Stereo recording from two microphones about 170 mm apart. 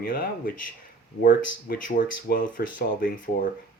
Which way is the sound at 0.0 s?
55° left (ahead or behind).